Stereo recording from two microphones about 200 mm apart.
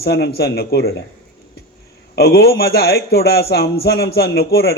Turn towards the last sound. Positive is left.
turn(degrees=50)  # may be behind; listen again after turning